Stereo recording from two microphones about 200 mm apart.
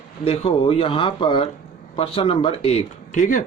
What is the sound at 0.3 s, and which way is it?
Speech, 25° left (ahead or behind).